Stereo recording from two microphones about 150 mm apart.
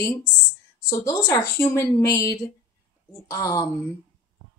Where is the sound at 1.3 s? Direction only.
15° left (ahead or behind).